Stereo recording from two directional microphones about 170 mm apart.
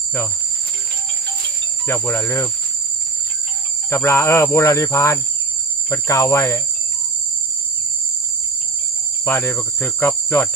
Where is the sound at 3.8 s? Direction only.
15° left (ahead or behind).